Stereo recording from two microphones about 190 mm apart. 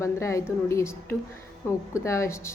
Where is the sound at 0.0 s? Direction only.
15° left (ahead or behind).